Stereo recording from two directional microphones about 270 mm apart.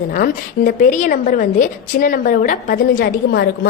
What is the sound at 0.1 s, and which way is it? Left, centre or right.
A woman's voice, left.